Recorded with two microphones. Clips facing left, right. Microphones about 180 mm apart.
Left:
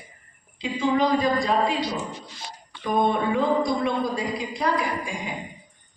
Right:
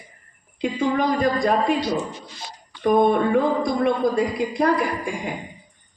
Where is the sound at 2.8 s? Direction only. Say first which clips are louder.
Right 5 dB; 50° right (ahead or behind).